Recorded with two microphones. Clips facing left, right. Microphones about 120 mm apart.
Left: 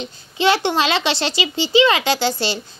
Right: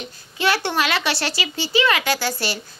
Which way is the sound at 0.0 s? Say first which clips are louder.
Left 4 dB; 25° left (ahead or behind).